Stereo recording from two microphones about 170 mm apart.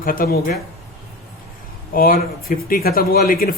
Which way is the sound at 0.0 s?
55° left (ahead or behind).